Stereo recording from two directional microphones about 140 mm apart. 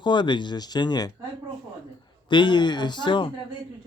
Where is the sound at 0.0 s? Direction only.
35° left (ahead or behind).